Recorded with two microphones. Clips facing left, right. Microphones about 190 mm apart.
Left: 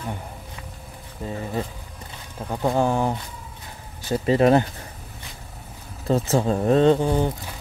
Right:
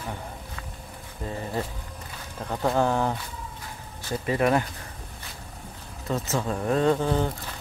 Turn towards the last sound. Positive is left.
turn(degrees=15)  # may be behind; listen again after turning